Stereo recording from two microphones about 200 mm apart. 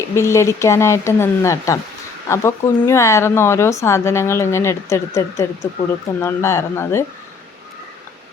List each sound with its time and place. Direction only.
0.2 s speech: 15° left (ahead or behind)